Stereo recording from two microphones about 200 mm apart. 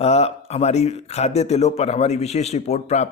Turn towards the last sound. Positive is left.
turn(degrees=35)  # may be behind; listen again after turning